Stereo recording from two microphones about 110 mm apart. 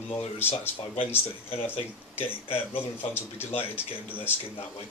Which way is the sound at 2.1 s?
20° left (ahead or behind).